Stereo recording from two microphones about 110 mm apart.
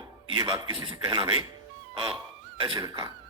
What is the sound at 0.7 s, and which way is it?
Speech, 50° right (ahead or behind).